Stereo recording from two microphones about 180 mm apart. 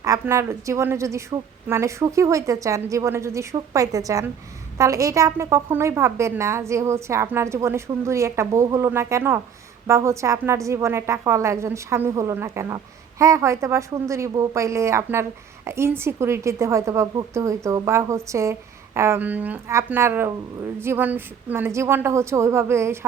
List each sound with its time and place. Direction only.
0.0 s a woman's voice: 15° right (ahead or behind)